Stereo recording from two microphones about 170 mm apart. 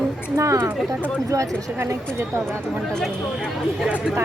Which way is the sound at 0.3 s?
20° right (ahead or behind).